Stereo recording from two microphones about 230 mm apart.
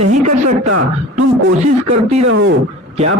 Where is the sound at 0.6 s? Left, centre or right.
Right.